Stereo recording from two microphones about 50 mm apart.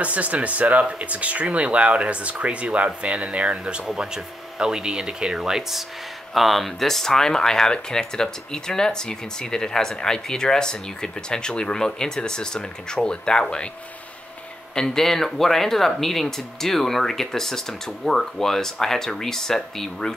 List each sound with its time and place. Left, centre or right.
0.0 s speech: right; by 13.7 s centre
14.8 s speech: centre